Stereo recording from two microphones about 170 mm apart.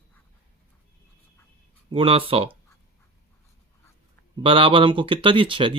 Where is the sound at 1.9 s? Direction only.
30° right (ahead or behind).